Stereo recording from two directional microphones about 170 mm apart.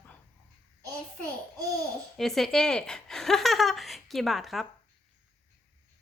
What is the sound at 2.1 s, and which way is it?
Speech, centre (ahead or behind).